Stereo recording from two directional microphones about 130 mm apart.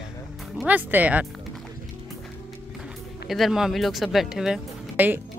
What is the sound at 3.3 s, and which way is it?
Speech, centre (ahead or behind).